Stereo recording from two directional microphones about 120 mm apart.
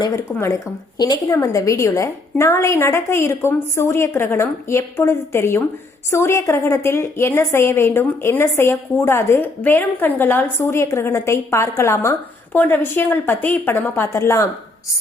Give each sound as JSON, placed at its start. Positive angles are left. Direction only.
{"t": 0.2, "sound": "a woman's voice", "side_deg": 20}
{"t": 0.9, "sound": "a woman's voice", "side_deg": 30}